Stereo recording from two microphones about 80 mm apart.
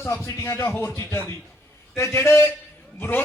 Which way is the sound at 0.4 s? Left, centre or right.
Left.